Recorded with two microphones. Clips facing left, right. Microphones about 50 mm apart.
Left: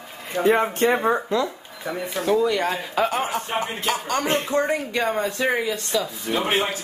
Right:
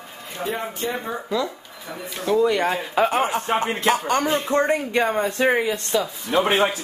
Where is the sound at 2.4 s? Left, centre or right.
Centre.